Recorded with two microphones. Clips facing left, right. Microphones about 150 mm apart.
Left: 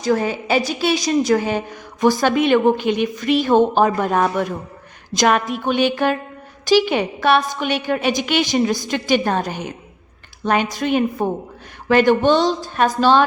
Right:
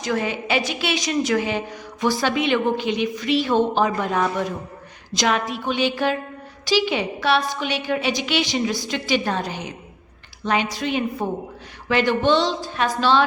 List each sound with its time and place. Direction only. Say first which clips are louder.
0.0 s a woman's voice: left 5 dB; 40° left (ahead or behind)